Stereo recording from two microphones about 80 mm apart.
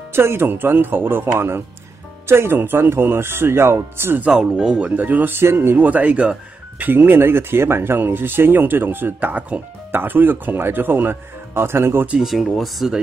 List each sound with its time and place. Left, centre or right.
0.1 s speech: right
4.3 s speech: centre; by 12.1 s right
12.2 s speech: centre